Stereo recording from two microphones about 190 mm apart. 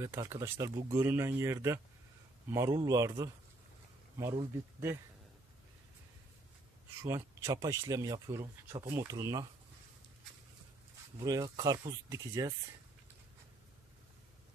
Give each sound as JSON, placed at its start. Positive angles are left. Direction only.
{"t": 0.0, "sound": "speech", "side_deg": -15}
{"t": 7.0, "sound": "speech", "side_deg": -15}
{"t": 11.2, "sound": "speech", "side_deg": -20}